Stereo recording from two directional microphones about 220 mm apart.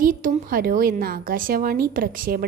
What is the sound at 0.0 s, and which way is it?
A woman's voice, 35° right (ahead or behind).